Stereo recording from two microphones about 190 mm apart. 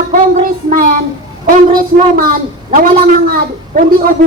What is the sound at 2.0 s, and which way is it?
A woman's voice, 45° right (ahead or behind).